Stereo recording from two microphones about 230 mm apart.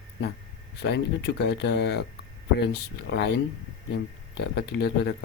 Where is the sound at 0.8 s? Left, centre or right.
Left.